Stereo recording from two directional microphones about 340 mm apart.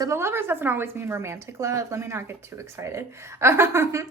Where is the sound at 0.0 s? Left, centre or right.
Centre.